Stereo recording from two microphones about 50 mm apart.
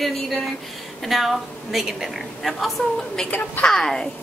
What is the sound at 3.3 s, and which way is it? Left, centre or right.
Speech, left.